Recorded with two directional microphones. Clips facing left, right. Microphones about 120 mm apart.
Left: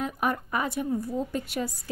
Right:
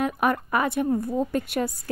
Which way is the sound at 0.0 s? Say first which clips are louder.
Right 5 dB; 70° right (ahead or behind).